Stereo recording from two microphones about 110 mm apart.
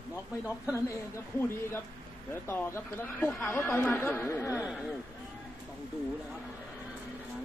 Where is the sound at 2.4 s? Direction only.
20° left (ahead or behind).